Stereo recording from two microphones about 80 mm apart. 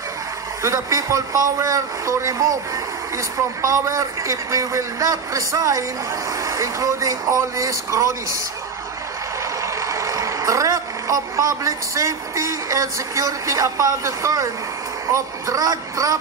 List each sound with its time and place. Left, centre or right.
0.6 s speech: right
9.8 s speech: right